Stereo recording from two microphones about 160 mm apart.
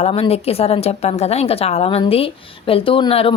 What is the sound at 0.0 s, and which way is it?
A woman's voice, 40° left (ahead or behind).